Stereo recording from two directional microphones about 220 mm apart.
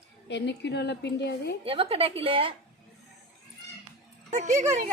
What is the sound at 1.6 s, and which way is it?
Speech, 25° right (ahead or behind).